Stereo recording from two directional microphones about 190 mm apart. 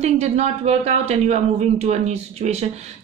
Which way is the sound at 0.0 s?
35° right (ahead or behind).